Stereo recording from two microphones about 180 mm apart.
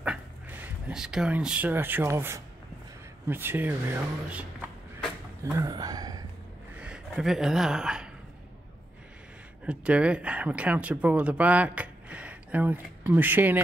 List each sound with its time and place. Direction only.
0.0 s speech: 10° right (ahead or behind)
6.8 s speech: 5° right (ahead or behind)
9.7 s speech: 5° right (ahead or behind)